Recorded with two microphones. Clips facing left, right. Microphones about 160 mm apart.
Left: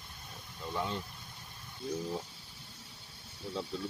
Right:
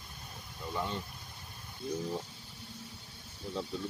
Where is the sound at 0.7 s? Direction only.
Centre (ahead or behind).